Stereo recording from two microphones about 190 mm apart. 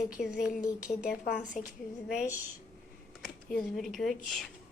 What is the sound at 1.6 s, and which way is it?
Speech, 40° left (ahead or behind).